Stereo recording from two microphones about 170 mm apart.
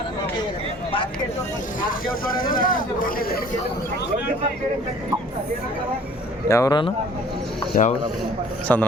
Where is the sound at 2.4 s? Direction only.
55° left (ahead or behind).